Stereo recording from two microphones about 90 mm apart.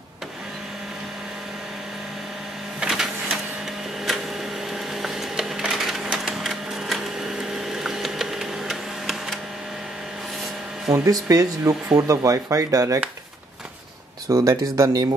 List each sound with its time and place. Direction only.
2.8 s printer: 10° right (ahead or behind)
5.0 s a sound: 5° right (ahead or behind)
10.9 s speech: 40° right (ahead or behind)
14.2 s speech: 35° right (ahead or behind)